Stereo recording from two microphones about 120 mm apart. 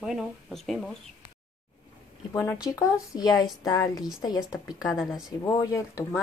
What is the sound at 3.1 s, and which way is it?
A woman's voice, 30° left (ahead or behind).